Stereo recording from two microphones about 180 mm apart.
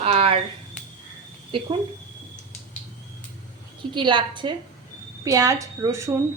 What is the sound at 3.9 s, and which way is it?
A woman's voice, 25° right (ahead or behind).